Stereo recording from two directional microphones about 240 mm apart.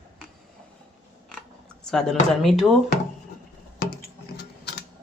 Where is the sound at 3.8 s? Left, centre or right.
Left.